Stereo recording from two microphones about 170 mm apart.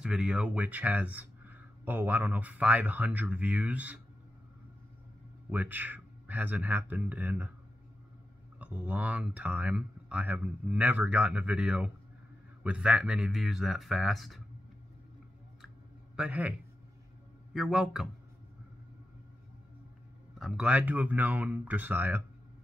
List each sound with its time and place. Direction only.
0.0 s speech: 5° right (ahead or behind)
5.5 s speech: 10° right (ahead or behind)
8.5 s speech: 10° right (ahead or behind)
16.2 s a man's voice: 10° right (ahead or behind)
20.3 s speech: centre (ahead or behind)